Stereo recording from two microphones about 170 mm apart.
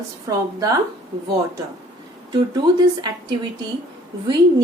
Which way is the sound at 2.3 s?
25° right (ahead or behind).